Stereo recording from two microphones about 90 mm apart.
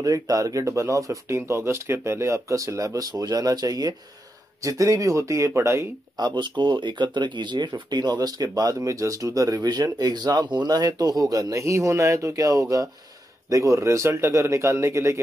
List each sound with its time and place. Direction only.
0.0 s speech: 40° right (ahead or behind)
6.1 s speech: 55° right (ahead or behind); by 15.1 s 35° right (ahead or behind)